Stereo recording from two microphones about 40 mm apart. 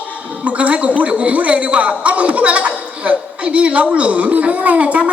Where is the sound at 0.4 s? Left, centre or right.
Right.